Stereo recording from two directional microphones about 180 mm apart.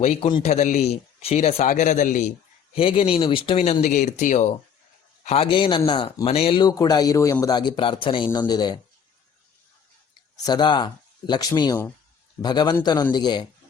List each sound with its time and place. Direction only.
0.0 s speech: 30° left (ahead or behind)
0.4 s speech: 40° left (ahead or behind)
2.7 s speech: 30° left (ahead or behind)
5.2 s speech: 35° left (ahead or behind)
10.3 s speech: 25° left (ahead or behind)